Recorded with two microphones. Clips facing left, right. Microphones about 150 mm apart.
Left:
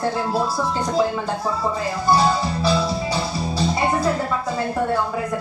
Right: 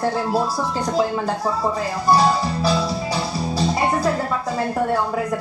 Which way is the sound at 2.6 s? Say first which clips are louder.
Left 1 dB; 40° right (ahead or behind).